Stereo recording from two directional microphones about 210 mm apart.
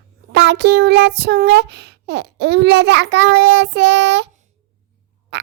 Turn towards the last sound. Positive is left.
turn(degrees=-55)  # may be behind; listen again after turning